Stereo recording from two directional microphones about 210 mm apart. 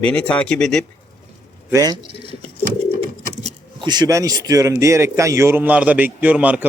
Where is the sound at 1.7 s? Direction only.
20° right (ahead or behind).